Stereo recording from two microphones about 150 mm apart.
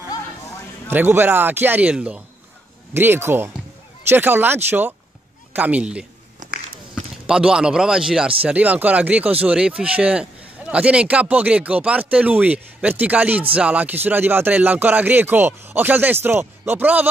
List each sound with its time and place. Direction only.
0.8 s speech: 15° right (ahead or behind)
6.4 s a sound: 55° right (ahead or behind)
7.2 s a man's voice: 5° right (ahead or behind)